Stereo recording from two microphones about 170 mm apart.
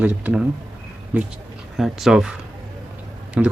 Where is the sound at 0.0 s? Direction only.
5° right (ahead or behind).